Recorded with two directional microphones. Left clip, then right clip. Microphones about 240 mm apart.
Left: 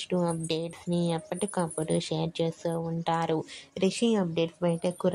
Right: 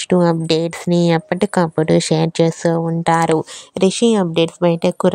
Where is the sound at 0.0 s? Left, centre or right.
Right.